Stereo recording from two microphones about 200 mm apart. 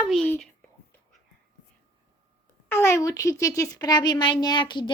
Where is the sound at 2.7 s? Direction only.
15° left (ahead or behind).